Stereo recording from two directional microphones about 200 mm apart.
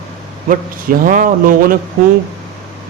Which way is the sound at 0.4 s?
45° right (ahead or behind).